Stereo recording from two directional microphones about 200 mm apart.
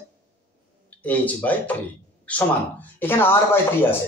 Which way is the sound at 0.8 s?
5° left (ahead or behind).